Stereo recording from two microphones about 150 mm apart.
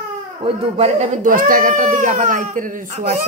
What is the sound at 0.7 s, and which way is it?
Speech, 50° right (ahead or behind).